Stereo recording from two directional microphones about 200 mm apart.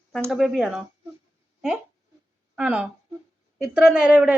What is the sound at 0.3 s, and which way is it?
Speech, centre (ahead or behind).